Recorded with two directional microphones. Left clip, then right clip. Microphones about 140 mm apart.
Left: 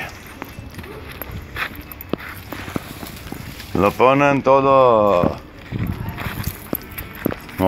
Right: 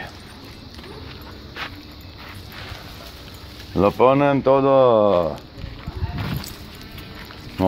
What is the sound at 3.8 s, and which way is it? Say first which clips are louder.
Speech: left 1 dB; 25° right (ahead or behind).